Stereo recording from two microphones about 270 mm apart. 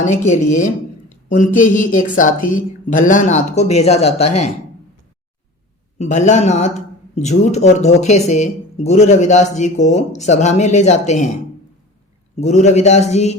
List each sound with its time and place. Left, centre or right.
0.3 s speech: left
6.0 s speech: left
12.4 s speech: left